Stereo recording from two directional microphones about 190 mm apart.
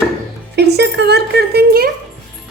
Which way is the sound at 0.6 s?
60° right (ahead or behind).